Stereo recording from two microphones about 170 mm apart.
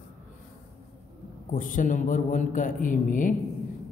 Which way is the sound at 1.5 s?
50° left (ahead or behind).